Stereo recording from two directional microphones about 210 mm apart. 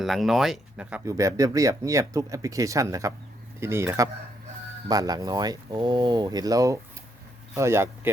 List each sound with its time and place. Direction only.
0.0 s speech: centre (ahead or behind)